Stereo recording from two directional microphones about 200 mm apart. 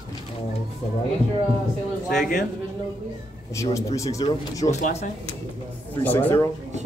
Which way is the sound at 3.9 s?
15° left (ahead or behind).